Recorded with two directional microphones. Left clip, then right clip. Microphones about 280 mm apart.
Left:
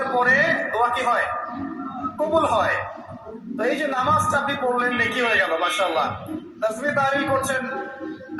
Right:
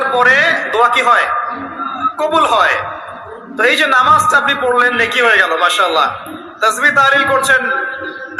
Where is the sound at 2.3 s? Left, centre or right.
Right.